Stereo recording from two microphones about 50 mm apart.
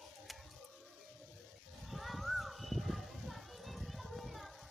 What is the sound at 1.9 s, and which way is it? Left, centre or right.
Children playing, centre.